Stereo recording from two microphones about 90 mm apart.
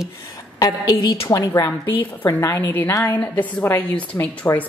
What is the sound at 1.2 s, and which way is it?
A woman's voice, 40° left (ahead or behind).